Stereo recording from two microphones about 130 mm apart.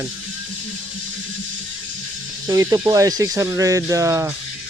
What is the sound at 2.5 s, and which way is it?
Speech, 30° right (ahead or behind).